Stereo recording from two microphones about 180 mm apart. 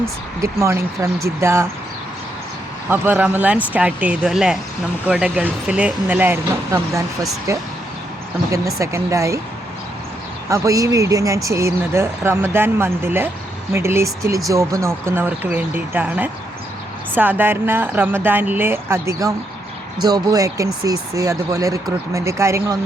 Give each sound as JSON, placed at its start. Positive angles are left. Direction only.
{"t": 0.0, "sound": "speech", "side_deg": -15}
{"t": 2.9, "sound": "speech", "side_deg": -10}
{"t": 10.5, "sound": "speech", "side_deg": -20}